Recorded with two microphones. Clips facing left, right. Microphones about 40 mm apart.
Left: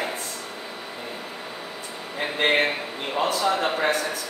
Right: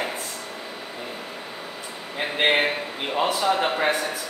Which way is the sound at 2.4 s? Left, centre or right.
Centre.